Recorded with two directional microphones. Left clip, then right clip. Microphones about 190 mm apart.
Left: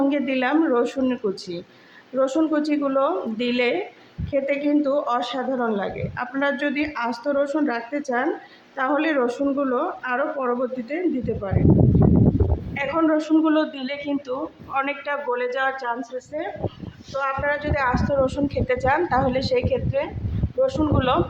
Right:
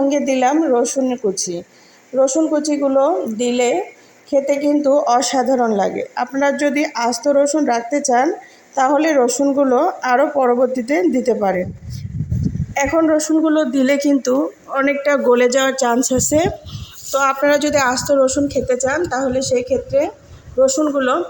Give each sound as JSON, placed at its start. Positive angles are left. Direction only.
{"t": 0.1, "sound": "a woman's voice", "side_deg": -20}
{"t": 13.0, "sound": "a woman's voice", "side_deg": -15}
{"t": 13.7, "sound": "a woman's voice", "side_deg": -35}